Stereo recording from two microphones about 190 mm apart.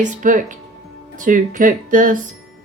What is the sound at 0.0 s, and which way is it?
Speech, 45° right (ahead or behind).